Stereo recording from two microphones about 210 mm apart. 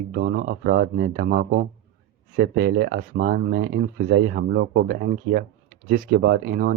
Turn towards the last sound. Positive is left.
turn(degrees=-45)  # may be behind; listen again after turning